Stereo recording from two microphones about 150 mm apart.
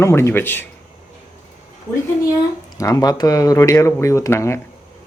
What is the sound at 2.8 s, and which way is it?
Speech, 25° left (ahead or behind).